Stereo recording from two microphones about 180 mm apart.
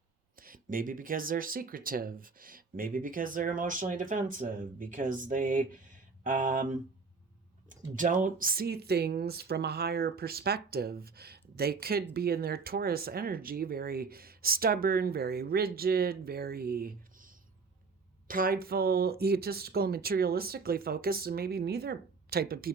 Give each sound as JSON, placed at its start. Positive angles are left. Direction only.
{"t": 0.3, "sound": "speech", "side_deg": -50}